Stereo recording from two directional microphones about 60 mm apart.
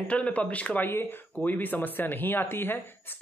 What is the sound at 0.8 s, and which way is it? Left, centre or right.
Speech, left.